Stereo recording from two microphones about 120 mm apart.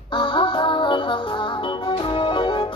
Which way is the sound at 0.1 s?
45° left (ahead or behind).